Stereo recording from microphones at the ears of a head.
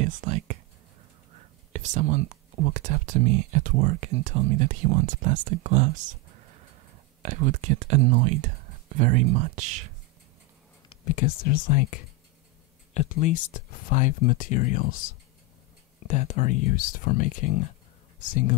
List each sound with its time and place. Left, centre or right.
0.0 s speech: right
10.9 s speech: left